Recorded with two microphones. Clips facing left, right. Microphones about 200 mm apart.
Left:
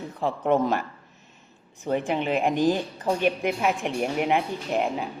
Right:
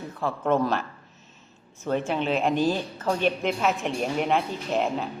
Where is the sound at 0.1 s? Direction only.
15° left (ahead or behind).